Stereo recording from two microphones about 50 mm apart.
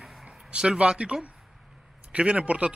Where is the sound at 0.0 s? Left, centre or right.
Centre.